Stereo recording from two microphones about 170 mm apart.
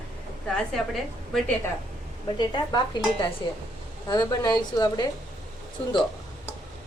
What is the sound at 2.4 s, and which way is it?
Speech, 25° left (ahead or behind).